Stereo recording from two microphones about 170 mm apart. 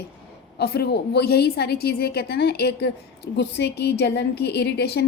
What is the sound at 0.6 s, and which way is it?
A woman's voice, 70° left (ahead or behind).